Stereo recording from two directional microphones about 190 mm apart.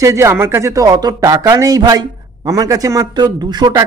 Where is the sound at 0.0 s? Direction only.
15° right (ahead or behind).